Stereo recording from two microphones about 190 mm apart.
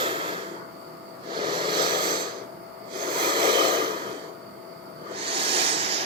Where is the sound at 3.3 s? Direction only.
25° right (ahead or behind).